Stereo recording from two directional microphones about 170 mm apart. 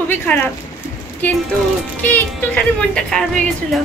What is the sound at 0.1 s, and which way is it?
A woman's voice, 10° left (ahead or behind).